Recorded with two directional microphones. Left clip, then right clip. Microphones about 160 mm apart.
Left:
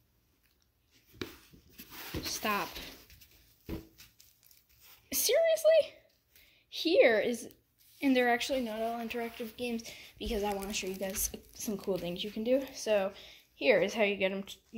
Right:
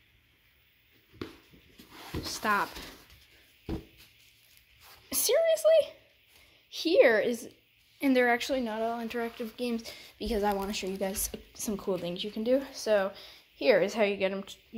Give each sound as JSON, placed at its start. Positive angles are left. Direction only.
{"t": 2.4, "sound": "speech", "side_deg": 5}
{"t": 5.1, "sound": "a child's voice", "side_deg": 0}